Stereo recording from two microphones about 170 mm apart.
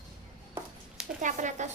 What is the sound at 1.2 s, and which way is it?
Speech, 45° right (ahead or behind).